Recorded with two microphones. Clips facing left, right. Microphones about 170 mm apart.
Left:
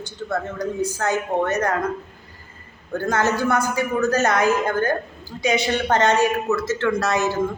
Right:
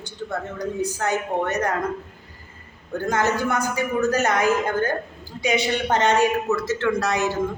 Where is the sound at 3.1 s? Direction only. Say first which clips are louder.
Left 2 dB; 15° right (ahead or behind).